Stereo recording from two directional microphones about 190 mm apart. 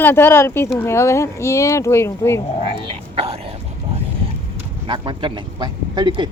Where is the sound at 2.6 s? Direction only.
25° right (ahead or behind).